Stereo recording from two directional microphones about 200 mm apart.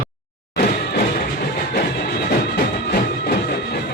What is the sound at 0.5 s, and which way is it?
Music, 45° left (ahead or behind).